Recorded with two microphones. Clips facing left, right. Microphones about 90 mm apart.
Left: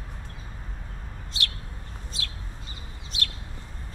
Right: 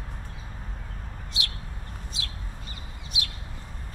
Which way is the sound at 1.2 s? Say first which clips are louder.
Left 2 dB; 15° right (ahead or behind).